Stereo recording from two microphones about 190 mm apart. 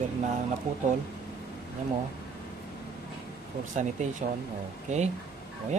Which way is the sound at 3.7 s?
40° right (ahead or behind).